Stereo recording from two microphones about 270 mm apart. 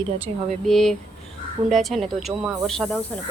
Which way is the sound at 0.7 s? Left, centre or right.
Centre.